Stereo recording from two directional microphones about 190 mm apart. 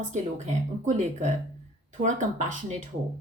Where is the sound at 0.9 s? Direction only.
40° right (ahead or behind).